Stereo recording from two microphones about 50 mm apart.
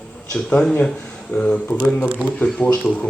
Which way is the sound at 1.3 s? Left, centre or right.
Left.